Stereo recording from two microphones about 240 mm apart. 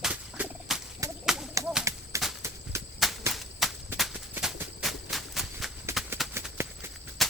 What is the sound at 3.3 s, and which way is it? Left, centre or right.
Horse, centre.